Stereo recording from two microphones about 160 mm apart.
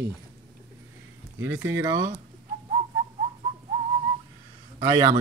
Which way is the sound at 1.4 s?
15° right (ahead or behind).